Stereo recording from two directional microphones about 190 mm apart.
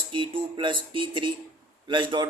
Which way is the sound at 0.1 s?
25° right (ahead or behind).